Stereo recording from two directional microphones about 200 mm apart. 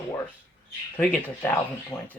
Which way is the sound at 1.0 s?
10° left (ahead or behind).